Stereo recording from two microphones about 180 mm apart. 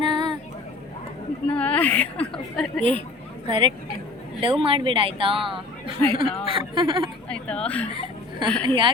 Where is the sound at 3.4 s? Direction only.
30° right (ahead or behind).